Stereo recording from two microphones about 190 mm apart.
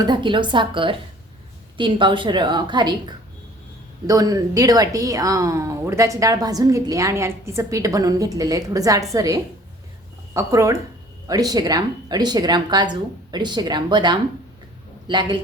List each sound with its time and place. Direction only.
0.0 s a woman's voice: 25° right (ahead or behind)